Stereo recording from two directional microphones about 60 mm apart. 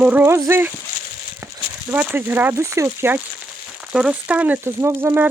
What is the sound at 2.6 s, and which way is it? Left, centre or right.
Speech, right.